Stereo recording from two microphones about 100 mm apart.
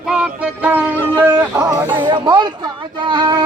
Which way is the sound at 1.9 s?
50° right (ahead or behind).